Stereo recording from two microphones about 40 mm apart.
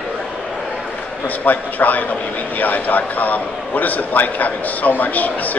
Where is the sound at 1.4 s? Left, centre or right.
Left.